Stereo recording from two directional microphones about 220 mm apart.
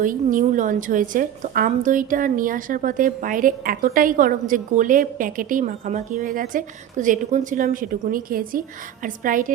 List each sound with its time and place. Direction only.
0.0 s a woman's voice: 35° right (ahead or behind)